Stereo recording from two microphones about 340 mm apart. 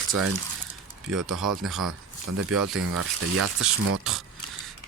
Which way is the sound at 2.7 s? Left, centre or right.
Right.